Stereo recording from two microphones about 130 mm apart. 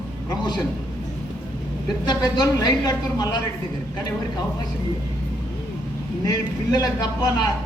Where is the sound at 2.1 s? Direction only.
30° left (ahead or behind).